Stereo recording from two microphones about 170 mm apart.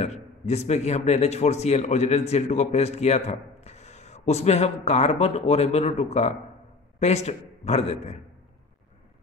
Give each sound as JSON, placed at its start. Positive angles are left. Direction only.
{"t": 0.0, "sound": "a man's voice", "side_deg": 40}